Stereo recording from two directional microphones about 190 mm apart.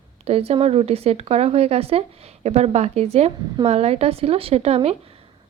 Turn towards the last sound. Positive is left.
turn(degrees=-30)  # may be behind; listen again after turning